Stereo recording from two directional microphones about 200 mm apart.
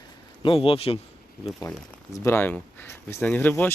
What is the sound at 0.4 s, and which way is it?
Speech, 25° left (ahead or behind).